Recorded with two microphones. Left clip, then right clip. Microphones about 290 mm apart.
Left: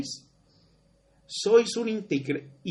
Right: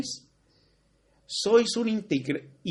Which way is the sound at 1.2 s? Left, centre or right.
Right.